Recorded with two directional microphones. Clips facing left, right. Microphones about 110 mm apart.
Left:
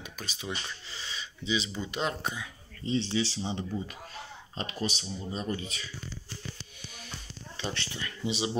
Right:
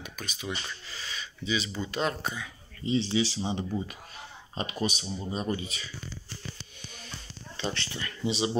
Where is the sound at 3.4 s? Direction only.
15° right (ahead or behind).